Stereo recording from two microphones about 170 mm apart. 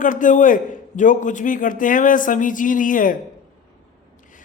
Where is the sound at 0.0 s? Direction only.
50° left (ahead or behind).